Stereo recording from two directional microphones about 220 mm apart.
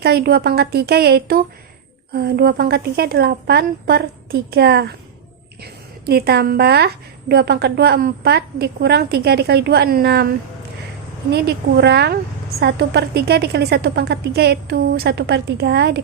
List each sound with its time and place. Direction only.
0.0 s a woman's voice: 45° right (ahead or behind)